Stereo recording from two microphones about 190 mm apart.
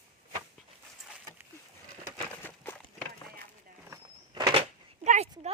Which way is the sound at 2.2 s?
10° left (ahead or behind).